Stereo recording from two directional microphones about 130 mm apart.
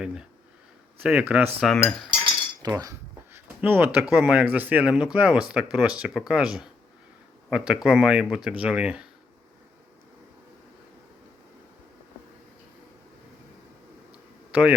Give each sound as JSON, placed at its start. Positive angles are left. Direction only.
{"t": 0.0, "sound": "speech", "side_deg": -5}
{"t": 1.6, "sound": "speech", "side_deg": 0}
{"t": 2.2, "sound": "cutlery", "side_deg": -30}
{"t": 3.3, "sound": "speech", "side_deg": -15}
{"t": 14.1, "sound": "a sound", "side_deg": -10}